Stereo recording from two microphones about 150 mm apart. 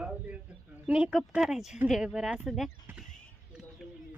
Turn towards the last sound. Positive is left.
turn(degrees=0)  # may be behind; listen again after turning